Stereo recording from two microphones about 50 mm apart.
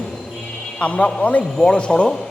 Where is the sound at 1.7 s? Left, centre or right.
Left.